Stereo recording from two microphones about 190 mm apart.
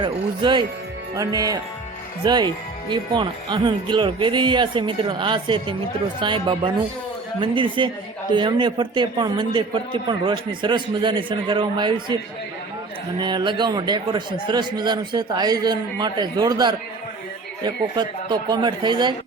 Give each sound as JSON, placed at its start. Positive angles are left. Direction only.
{"t": 0.0, "sound": "speech", "side_deg": -25}
{"t": 13.1, "sound": "speech", "side_deg": -25}